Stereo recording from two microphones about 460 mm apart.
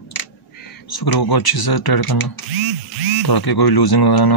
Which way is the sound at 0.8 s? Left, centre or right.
Left.